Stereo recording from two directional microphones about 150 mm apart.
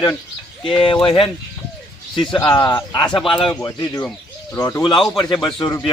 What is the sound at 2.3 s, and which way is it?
Speech, 30° left (ahead or behind).